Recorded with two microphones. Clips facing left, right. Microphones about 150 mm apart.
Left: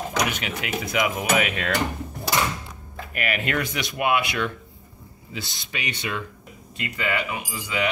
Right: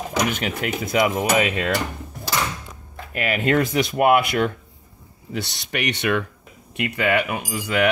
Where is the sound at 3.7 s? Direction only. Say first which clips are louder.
Right 7 dB; 45° right (ahead or behind).